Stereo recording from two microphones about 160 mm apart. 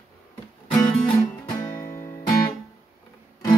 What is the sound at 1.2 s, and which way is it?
Music, 15° left (ahead or behind).